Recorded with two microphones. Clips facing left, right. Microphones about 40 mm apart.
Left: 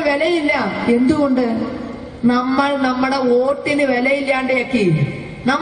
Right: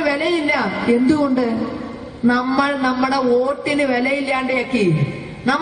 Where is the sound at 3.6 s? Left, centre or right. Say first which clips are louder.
Left 2 dB; left.